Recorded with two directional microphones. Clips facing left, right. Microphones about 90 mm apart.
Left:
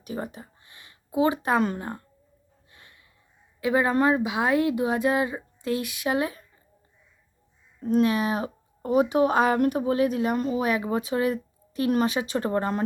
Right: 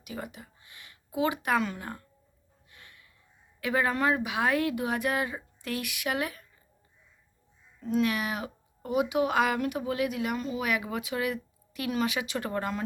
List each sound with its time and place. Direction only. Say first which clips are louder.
0.0 s speech: left 6 dB; 35° left (ahead or behind)
2.7 s a sound: even; 25° left (ahead or behind)
3.6 s speech: left 5 dB; 20° left (ahead or behind)
7.8 s speech: left 5 dB; 45° left (ahead or behind)
8.0 s speech: left 6 dB; 30° left (ahead or behind)